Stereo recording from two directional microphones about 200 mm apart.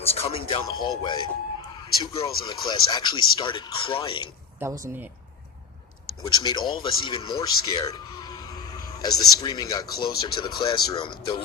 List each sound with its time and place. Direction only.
0.0 s speech: 30° left (ahead or behind)
4.6 s speech: 15° right (ahead or behind)
6.2 s speech: 20° left (ahead or behind)